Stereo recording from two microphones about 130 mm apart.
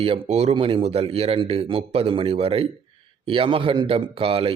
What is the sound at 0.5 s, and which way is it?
Speech, 45° right (ahead or behind).